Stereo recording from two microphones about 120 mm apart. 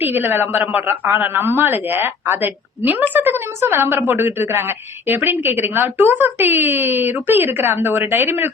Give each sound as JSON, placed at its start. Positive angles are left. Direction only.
{"t": 0.0, "sound": "a woman's voice", "side_deg": -15}